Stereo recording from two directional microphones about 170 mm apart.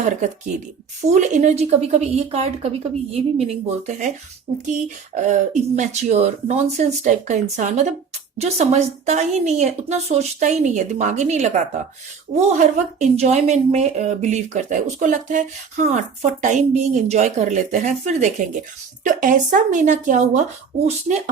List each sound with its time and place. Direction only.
1.0 s a woman's voice: 45° right (ahead or behind)